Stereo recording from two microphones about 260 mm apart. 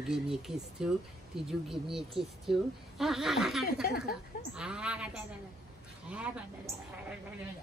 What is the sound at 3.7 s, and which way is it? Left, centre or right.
Speech, left.